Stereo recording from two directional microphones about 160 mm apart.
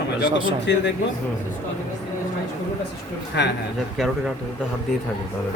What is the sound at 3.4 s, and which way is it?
Speech, 90° left.